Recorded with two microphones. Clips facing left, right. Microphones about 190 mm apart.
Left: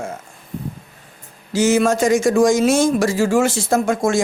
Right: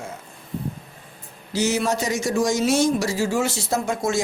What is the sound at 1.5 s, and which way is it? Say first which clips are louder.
A man's voice: left 7 dB; 50° left (ahead or behind).